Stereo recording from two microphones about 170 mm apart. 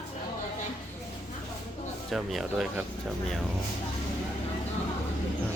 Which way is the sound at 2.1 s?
Centre (ahead or behind).